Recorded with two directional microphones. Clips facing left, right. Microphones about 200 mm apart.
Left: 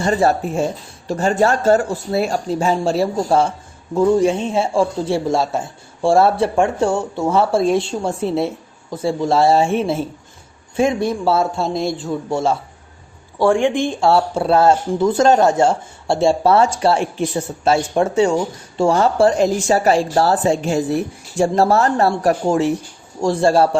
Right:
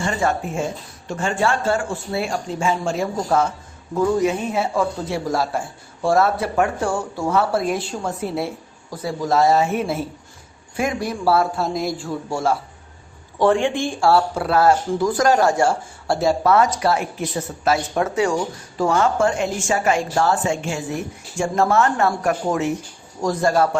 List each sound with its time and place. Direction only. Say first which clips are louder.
0.0 s a woman's voice: left 5 dB; 35° left (ahead or behind)